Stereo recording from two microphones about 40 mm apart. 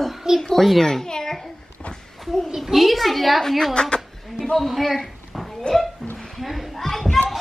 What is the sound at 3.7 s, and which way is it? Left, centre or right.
Speech, left.